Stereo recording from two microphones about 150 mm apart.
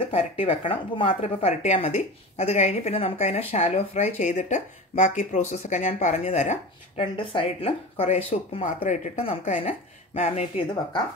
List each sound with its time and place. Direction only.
0.0 s speech: 40° left (ahead or behind)
7.0 s speech: 35° left (ahead or behind)
8.8 s speech: 55° left (ahead or behind)
9.2 s speech: 40° left (ahead or behind)